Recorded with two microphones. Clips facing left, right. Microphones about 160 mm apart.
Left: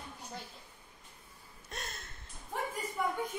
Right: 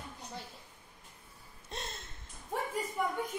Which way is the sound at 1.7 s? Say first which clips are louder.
Right 2 dB; 25° right (ahead or behind).